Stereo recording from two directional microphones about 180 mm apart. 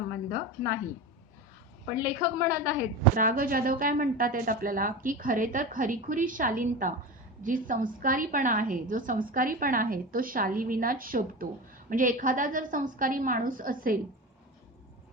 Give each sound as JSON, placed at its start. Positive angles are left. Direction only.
{"t": 0.1, "sound": "a woman's voice", "side_deg": -50}
{"t": 1.9, "sound": "a woman's voice", "side_deg": -50}